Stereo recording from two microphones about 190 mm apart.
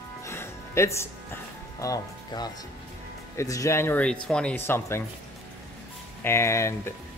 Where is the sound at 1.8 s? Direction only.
20° left (ahead or behind).